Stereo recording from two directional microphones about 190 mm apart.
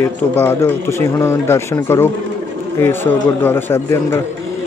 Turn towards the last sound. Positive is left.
turn(degrees=15)  # may be behind; listen again after turning